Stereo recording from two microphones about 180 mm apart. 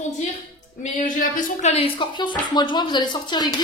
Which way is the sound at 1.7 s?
30° left (ahead or behind).